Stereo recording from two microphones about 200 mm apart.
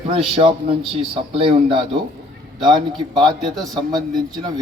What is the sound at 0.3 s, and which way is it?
Speech, 25° right (ahead or behind).